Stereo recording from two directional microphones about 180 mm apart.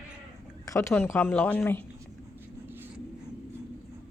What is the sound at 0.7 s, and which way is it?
Speech, 15° left (ahead or behind).